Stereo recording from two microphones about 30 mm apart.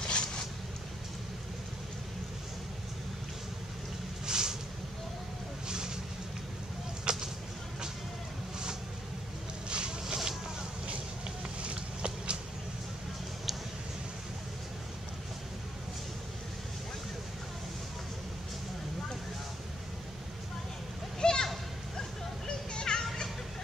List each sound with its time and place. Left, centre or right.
0.0 s vehicle: left
4.3 s boat: right
5.7 s vehicle: right
7.1 s a sound: right
9.7 s a sound: right
10.0 s vehicle: centre
11.6 s a sound: right
21.2 s children playing: left
22.7 s music: left